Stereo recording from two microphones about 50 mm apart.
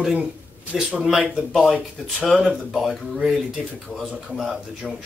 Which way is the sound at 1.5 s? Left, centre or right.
Centre.